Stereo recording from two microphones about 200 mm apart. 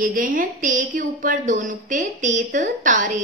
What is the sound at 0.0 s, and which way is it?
A woman's voice, 40° right (ahead or behind).